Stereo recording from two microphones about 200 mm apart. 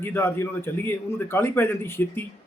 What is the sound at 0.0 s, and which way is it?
Speech, 10° left (ahead or behind).